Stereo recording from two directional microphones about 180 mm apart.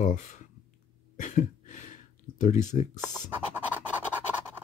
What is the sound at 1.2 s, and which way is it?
Cough, 45° left (ahead or behind).